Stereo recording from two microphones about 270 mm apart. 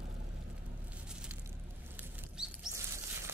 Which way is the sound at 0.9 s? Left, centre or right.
Centre.